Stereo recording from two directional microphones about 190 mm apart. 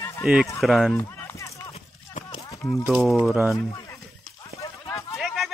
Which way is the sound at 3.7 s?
15° left (ahead or behind).